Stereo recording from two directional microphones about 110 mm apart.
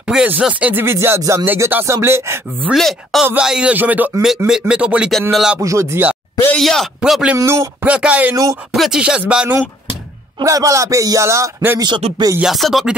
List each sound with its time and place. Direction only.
0.0 s speech: 10° right (ahead or behind)
2.7 s a man's voice: centre (ahead or behind)
3.3 s a man's voice: 10° right (ahead or behind)
5.6 s speech: 30° right (ahead or behind)
6.5 s a man's voice: centre (ahead or behind)
7.3 s speech: 25° right (ahead or behind)
7.8 s speech: 10° right (ahead or behind)
10.4 s speech: 30° right (ahead or behind)
12.0 s a sound: 65° right (ahead or behind)
12.4 s a man's voice: centre (ahead or behind)